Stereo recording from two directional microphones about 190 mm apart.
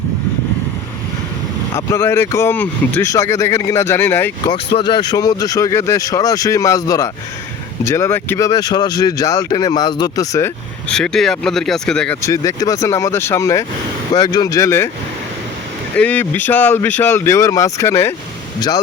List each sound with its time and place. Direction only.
1.7 s speech: 15° left (ahead or behind)
4.4 s speech: 30° left (ahead or behind)
10.8 s speech: 5° left (ahead or behind)
12.2 s speech: 15° left (ahead or behind)
16.0 s speech: 10° left (ahead or behind)